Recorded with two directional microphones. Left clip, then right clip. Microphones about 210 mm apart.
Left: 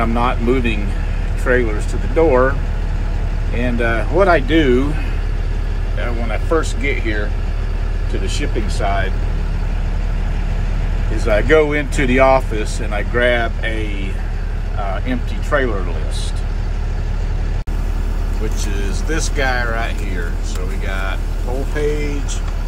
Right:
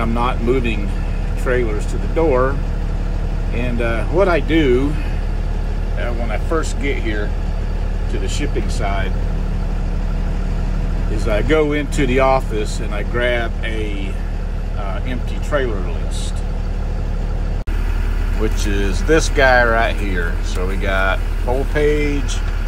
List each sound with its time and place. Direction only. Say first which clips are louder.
0.0 s speech: left 2 dB; 10° right (ahead or behind)
3.5 s speech: left 3 dB; 10° right (ahead or behind)
5.9 s speech: even; 5° right (ahead or behind)
8.3 s speech: left 1 dB; 5° right (ahead or behind)
11.1 s speech: left 3 dB; 5° right (ahead or behind)
15.0 s speech: left 4 dB; centre (ahead or behind)
18.6 s speech: right 4 dB; centre (ahead or behind)